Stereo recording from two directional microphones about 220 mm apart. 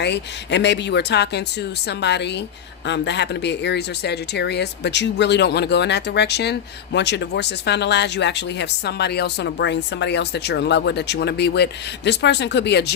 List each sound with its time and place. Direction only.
0.0 s speech: 50° left (ahead or behind)